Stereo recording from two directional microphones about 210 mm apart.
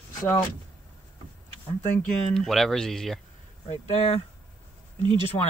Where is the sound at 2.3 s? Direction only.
Centre (ahead or behind).